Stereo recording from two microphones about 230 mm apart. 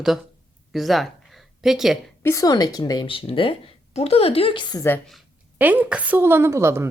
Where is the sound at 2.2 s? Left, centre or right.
Centre.